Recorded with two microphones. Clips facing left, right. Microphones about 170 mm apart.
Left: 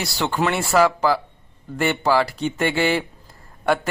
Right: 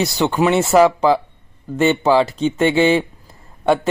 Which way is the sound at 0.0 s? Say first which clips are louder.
Right 6 dB; 20° right (ahead or behind).